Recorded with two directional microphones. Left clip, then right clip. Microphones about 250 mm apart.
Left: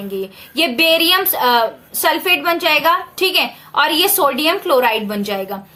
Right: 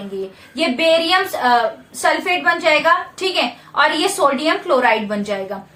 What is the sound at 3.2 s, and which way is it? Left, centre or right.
A woman's voice, left.